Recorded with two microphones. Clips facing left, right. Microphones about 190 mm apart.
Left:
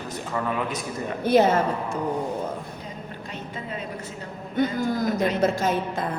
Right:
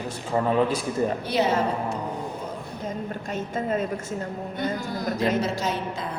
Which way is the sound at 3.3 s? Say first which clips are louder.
Right 8 dB; 45° right (ahead or behind).